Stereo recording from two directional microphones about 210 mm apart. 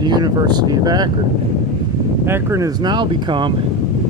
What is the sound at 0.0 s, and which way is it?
Speech, 20° right (ahead or behind).